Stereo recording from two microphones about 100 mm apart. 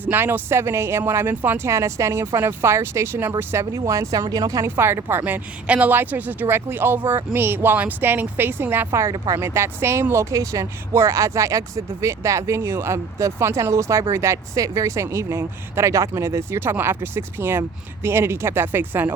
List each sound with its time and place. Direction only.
0.0 s speech: 20° right (ahead or behind); by 4.7 s 35° right (ahead or behind)
4.8 s speech: 25° right (ahead or behind)
9.0 s speech: 40° right (ahead or behind)
9.4 s speech: 25° right (ahead or behind)